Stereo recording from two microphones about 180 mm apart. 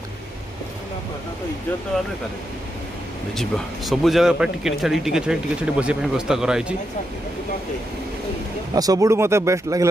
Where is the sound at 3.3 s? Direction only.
Centre (ahead or behind).